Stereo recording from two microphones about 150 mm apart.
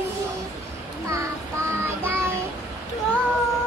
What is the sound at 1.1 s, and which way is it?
Child singing, 20° right (ahead or behind).